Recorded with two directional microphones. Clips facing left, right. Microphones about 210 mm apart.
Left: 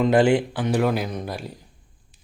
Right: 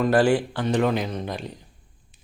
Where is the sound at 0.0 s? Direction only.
20° left (ahead or behind).